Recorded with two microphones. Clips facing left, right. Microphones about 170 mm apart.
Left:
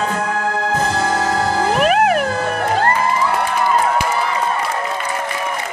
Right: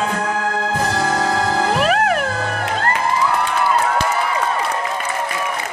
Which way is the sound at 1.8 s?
10° left (ahead or behind).